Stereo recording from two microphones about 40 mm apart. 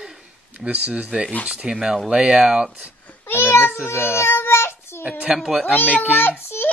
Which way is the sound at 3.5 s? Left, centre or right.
Left.